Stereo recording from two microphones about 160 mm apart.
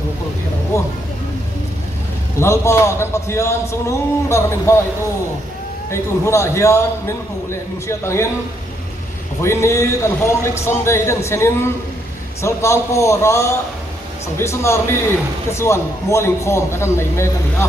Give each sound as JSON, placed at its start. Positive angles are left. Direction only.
{"t": 0.7, "sound": "speech", "side_deg": 20}
{"t": 2.3, "sound": "a man's voice", "side_deg": 15}
{"t": 5.9, "sound": "a man's voice", "side_deg": 15}
{"t": 9.4, "sound": "a man's voice", "side_deg": 15}